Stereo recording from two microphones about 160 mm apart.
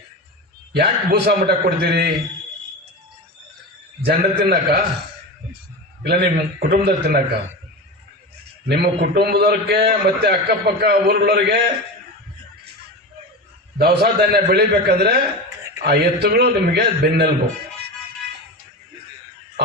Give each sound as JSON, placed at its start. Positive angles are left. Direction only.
{"t": 0.7, "sound": "a man's voice", "side_deg": -90}
{"t": 4.0, "sound": "a man's voice", "side_deg": -85}
{"t": 6.0, "sound": "a man's voice", "side_deg": -85}
{"t": 8.6, "sound": "a man's voice", "side_deg": -90}
{"t": 13.7, "sound": "a man's voice", "side_deg": -85}
{"t": 19.6, "sound": "a man's voice", "side_deg": -90}